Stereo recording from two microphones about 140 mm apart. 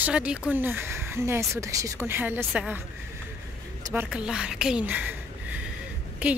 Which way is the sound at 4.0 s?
5° right (ahead or behind).